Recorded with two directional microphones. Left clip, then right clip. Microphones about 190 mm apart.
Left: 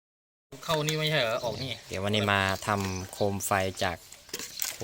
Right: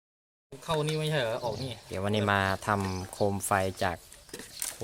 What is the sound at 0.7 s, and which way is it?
Speech, 35° right (ahead or behind).